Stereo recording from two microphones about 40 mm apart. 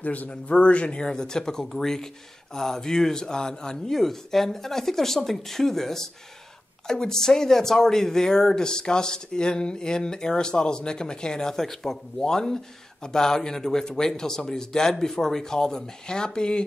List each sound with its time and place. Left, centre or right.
0.0 s a man's voice: left
1.0 s speech: centre